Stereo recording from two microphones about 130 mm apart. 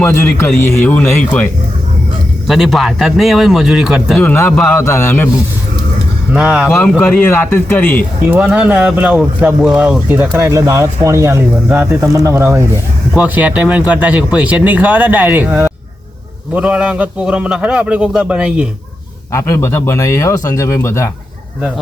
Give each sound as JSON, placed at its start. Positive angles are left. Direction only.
{"t": 0.0, "sound": "a man's voice", "side_deg": 20}
{"t": 2.5, "sound": "a man's voice", "side_deg": 0}
{"t": 4.2, "sound": "a man's voice", "side_deg": 15}
{"t": 6.3, "sound": "speech", "side_deg": -10}
{"t": 7.0, "sound": "a man's voice", "side_deg": 15}
{"t": 8.3, "sound": "speech", "side_deg": -10}
{"t": 19.3, "sound": "a man's voice", "side_deg": 20}